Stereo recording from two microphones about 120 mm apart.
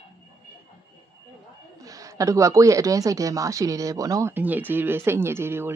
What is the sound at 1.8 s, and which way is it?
A woman's voice, 30° right (ahead or behind).